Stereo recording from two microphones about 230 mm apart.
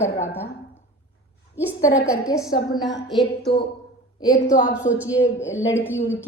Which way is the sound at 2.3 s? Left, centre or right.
Centre.